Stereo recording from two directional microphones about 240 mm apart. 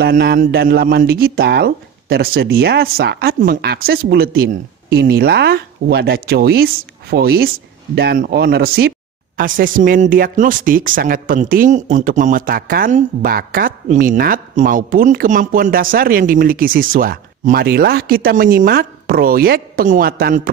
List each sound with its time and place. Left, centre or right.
0.0 s speech: right